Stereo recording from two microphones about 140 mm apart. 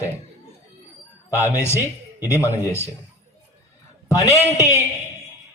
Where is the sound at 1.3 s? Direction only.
20° left (ahead or behind).